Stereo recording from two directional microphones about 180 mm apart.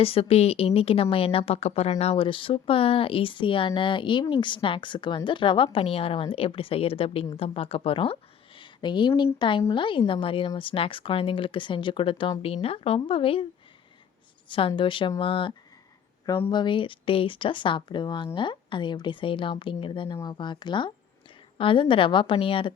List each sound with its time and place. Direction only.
0.0 s a woman's voice: 30° left (ahead or behind)
14.4 s speech: 25° left (ahead or behind)